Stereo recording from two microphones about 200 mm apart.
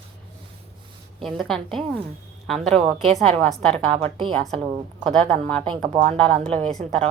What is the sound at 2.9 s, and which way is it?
Speech, 30° right (ahead or behind).